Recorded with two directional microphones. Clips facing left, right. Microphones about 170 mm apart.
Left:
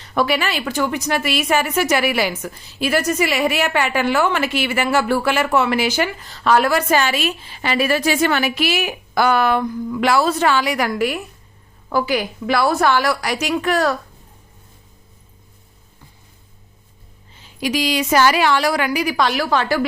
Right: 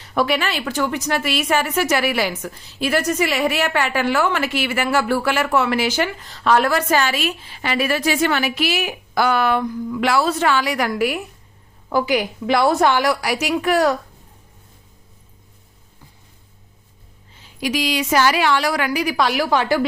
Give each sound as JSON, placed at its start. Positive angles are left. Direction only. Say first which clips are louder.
{"t": 0.0, "sound": "a woman's voice", "louder": "left 1 dB", "side_deg": -5}
{"t": 10.9, "sound": "a woman's voice", "louder": "even", "side_deg": -10}
{"t": 17.6, "sound": "speech", "louder": "left 1 dB", "side_deg": 35}
{"t": 19.1, "sound": "a woman's voice", "louder": "right 2 dB", "side_deg": -10}